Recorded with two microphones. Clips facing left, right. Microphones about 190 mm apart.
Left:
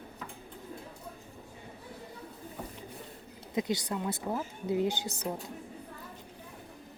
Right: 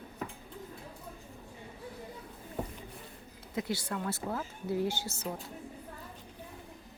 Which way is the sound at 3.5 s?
20° left (ahead or behind).